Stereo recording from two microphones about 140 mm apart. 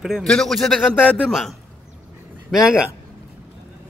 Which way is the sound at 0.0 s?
Centre (ahead or behind).